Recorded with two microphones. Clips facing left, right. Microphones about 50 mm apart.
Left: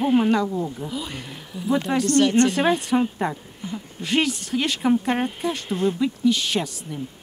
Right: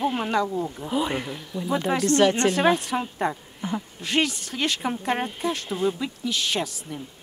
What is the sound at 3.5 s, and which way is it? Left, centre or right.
Speech, right.